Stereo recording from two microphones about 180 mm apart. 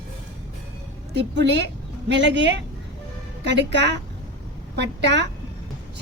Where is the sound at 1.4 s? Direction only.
70° right (ahead or behind).